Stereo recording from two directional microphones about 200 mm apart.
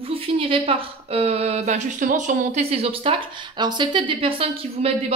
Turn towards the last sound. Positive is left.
turn(degrees=-30)  # may be behind; listen again after turning